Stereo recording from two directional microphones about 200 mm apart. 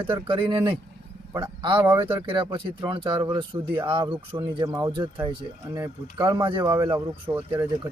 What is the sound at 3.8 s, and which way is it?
Speech, 25° right (ahead or behind).